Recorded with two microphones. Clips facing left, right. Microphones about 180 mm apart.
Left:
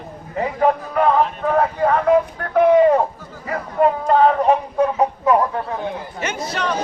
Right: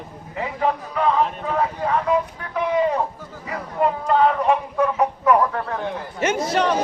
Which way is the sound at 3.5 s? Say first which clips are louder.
Left 4 dB; 45° left (ahead or behind).